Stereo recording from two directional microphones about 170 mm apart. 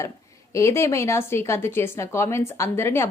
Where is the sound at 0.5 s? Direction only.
15° left (ahead or behind).